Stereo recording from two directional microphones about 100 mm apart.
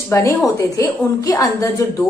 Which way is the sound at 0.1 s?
30° left (ahead or behind).